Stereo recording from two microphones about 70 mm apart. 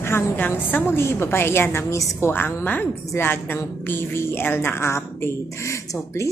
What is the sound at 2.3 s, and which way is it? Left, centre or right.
A woman's voice, left.